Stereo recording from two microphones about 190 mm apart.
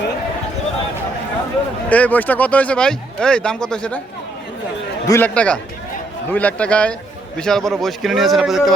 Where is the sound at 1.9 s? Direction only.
10° left (ahead or behind).